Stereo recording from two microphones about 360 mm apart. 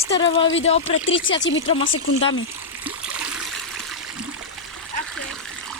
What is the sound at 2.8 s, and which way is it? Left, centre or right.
Stream, centre.